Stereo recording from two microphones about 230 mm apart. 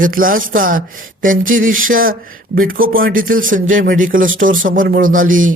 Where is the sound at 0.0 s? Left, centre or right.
Right.